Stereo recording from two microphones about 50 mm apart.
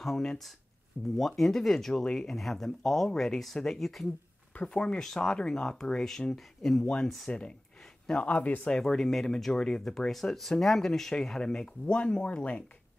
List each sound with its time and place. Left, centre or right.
0.0 s speech: centre
4.6 s speech: centre
7.2 s speech: centre
8.6 s speech: centre